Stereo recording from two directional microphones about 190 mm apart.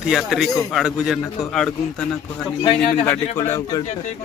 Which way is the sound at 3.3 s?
15° left (ahead or behind).